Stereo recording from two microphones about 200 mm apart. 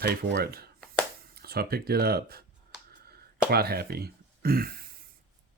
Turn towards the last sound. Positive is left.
turn(degrees=-50)  # may be behind; listen again after turning